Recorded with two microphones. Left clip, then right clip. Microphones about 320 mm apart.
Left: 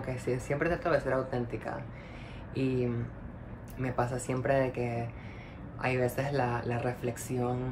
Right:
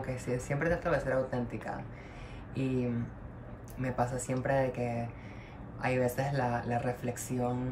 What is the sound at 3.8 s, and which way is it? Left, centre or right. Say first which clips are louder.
Speech: left 1 dB; centre.